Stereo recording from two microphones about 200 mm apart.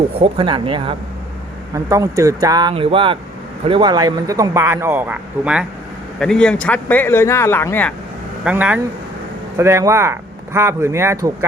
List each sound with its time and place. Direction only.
0.2 s speech: 25° right (ahead or behind)
1.7 s speech: 15° right (ahead or behind); by 7.9 s 10° left (ahead or behind)
8.4 s speech: 5° right (ahead or behind)